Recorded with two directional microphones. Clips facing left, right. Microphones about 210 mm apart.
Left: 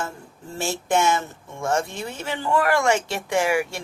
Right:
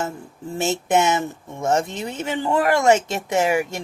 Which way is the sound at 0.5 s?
20° right (ahead or behind).